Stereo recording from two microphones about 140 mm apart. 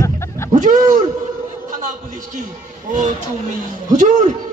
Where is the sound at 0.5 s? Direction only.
65° right (ahead or behind).